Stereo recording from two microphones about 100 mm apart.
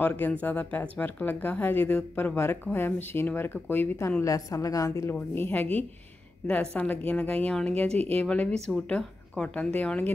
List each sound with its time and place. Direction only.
0.0 s speech: 15° left (ahead or behind)
4.2 s a woman's voice: 35° left (ahead or behind)
5.1 s speech: 20° left (ahead or behind)
7.9 s speech: 90° right
8.2 s speech: 15° left (ahead or behind)